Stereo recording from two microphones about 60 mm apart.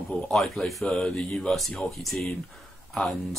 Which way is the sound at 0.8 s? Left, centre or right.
Centre.